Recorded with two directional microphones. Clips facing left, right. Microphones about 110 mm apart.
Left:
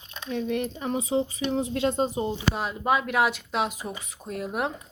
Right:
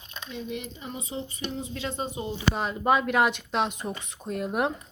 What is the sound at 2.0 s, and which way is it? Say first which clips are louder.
Speech: left 6 dB; 35° left (ahead or behind).